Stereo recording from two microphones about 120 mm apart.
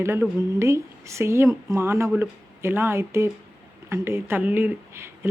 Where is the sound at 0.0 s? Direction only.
20° right (ahead or behind).